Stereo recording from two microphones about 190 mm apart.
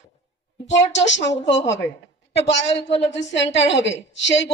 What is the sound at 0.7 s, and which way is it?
A woman's voice, 70° left (ahead or behind).